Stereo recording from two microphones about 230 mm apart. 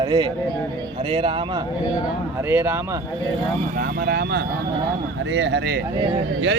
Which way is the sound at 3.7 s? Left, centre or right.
Right.